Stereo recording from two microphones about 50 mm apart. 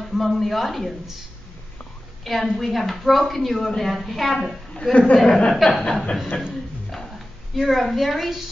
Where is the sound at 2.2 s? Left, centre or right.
Centre.